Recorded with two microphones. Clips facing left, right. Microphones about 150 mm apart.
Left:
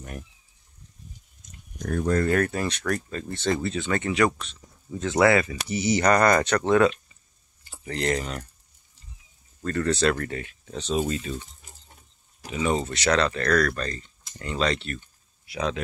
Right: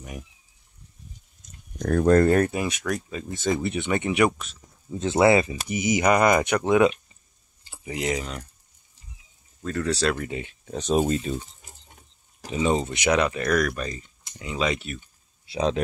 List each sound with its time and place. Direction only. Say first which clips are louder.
1.9 s speech: right 6 dB; 65° right (ahead or behind)
2.4 s speech: right 1 dB; 10° right (ahead or behind)
4.9 s speech: right 2 dB; 25° right (ahead or behind); by 8.5 s centre (ahead or behind)
9.6 s speech: left 1 dB; centre (ahead or behind)
10.7 s speech: right 4 dB; 45° right (ahead or behind)
12.5 s speech: right 2 dB; 20° right (ahead or behind)
15.4 s speech: right 4 dB; 30° right (ahead or behind)